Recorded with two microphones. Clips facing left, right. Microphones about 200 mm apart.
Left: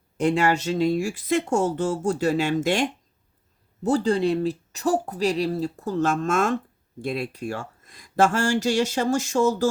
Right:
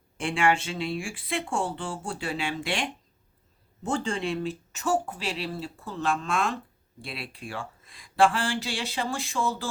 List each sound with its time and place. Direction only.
0.2 s speech: 40° left (ahead or behind)